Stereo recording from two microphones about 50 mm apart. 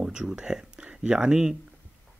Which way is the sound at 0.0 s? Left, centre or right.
Centre.